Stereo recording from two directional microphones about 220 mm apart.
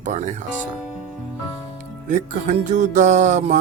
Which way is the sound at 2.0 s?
35° right (ahead or behind).